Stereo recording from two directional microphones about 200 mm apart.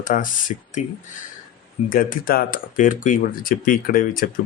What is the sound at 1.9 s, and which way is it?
Speech, 45° left (ahead or behind).